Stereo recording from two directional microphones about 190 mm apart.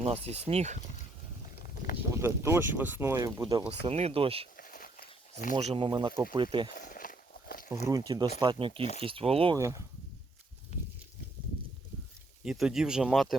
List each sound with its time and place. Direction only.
0.0 s speech: 30° right (ahead or behind)
2.2 s speech: 15° right (ahead or behind)
3.8 s speech: 35° right (ahead or behind)
4.5 s a sound: 45° left (ahead or behind)
5.5 s speech: 30° right (ahead or behind)
6.7 s a sound: 45° left (ahead or behind)
7.9 s speech: 20° right (ahead or behind)
9.6 s speech: 15° right (ahead or behind)
10.7 s a sound: 35° left (ahead or behind)
12.5 s speech: 5° right (ahead or behind)